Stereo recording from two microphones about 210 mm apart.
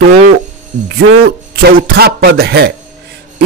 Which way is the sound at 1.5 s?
50° right (ahead or behind).